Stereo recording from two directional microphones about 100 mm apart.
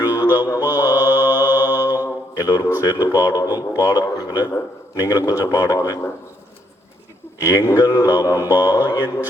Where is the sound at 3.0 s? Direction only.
20° right (ahead or behind).